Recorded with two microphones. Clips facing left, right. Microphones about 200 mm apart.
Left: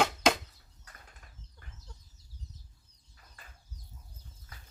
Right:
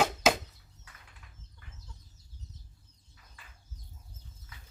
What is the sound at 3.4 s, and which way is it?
Chicken, 40° left (ahead or behind).